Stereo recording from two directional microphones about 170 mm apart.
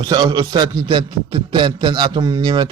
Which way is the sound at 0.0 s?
25° right (ahead or behind).